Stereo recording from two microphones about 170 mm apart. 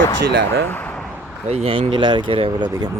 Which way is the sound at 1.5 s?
35° right (ahead or behind).